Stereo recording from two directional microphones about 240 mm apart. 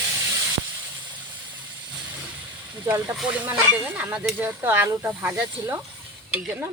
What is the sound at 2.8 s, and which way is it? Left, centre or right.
Speech, centre.